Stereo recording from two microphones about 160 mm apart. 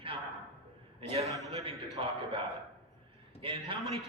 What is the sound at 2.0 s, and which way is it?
Speech, 35° right (ahead or behind).